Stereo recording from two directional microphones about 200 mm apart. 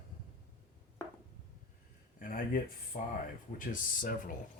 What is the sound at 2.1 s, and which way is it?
Speech, 45° left (ahead or behind).